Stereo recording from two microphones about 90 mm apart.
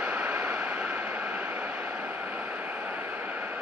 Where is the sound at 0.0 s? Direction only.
15° right (ahead or behind).